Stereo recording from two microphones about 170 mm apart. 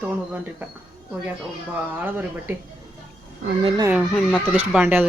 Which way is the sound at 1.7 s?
10° right (ahead or behind).